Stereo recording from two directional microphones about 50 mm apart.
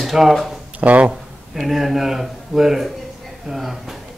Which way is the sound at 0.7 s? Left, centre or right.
Right.